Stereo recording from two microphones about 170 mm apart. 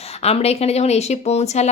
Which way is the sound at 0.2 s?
35° left (ahead or behind).